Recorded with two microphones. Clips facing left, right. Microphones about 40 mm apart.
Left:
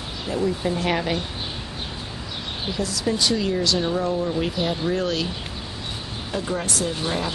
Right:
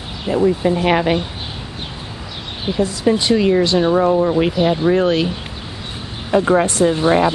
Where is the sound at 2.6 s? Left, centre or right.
Right.